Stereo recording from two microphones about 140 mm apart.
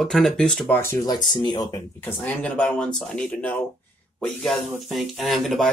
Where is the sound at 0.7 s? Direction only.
20° left (ahead or behind).